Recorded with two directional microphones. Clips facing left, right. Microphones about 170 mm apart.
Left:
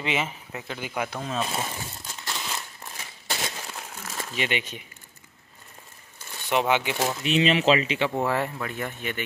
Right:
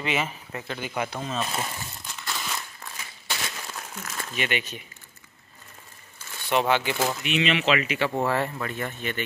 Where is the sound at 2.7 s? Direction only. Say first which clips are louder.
Even; 25° left (ahead or behind).